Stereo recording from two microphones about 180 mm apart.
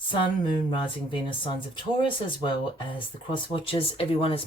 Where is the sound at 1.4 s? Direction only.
30° left (ahead or behind).